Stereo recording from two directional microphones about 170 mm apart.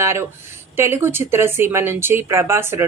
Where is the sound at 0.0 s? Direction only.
15° right (ahead or behind).